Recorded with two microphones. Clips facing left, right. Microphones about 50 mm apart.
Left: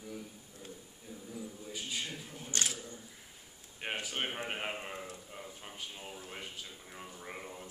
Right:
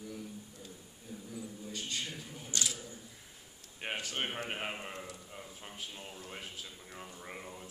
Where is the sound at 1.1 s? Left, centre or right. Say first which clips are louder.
Even; centre.